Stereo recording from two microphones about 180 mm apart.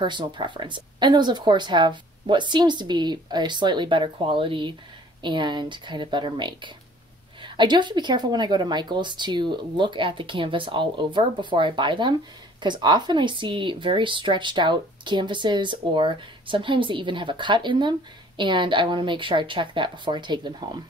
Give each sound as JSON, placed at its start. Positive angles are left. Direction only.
{"t": 0.0, "sound": "speech", "side_deg": -25}